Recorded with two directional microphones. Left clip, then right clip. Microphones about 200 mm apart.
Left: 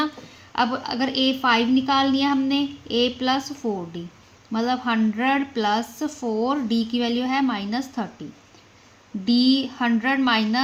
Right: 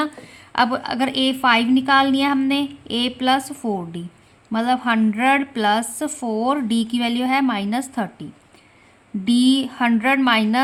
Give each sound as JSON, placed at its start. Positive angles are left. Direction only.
{"t": 0.5, "sound": "a woman's voice", "side_deg": -40}
{"t": 9.2, "sound": "a woman's voice", "side_deg": -30}